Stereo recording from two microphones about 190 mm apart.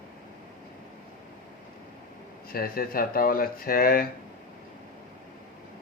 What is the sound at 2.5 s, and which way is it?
Speech, 50° left (ahead or behind).